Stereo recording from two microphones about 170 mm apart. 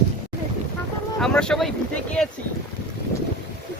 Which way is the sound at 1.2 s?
5° left (ahead or behind).